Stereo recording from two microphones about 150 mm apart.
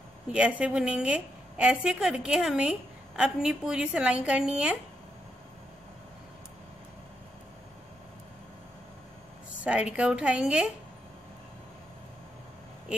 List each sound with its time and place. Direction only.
0.3 s a woman's voice: 5° right (ahead or behind)
9.6 s speech: 10° right (ahead or behind)